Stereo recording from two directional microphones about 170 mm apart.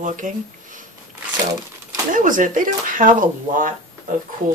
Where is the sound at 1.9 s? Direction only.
50° right (ahead or behind).